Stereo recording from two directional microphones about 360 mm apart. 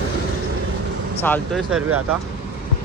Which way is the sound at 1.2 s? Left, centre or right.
Centre.